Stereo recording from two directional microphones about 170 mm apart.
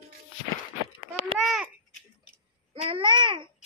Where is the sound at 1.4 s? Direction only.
Centre (ahead or behind).